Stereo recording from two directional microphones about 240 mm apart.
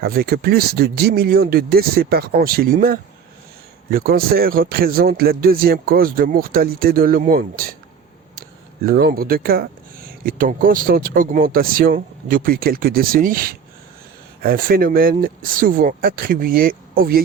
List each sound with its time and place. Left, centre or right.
0.0 s a man's voice: right